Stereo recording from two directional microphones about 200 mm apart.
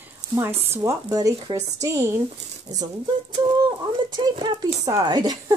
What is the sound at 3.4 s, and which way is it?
Speech, 20° right (ahead or behind).